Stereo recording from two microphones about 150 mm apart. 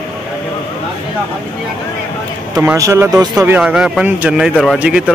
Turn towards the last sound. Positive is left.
turn(degrees=-5)  # may be behind; listen again after turning